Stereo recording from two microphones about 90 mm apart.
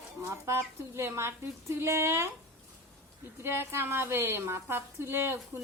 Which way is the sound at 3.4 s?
25° right (ahead or behind).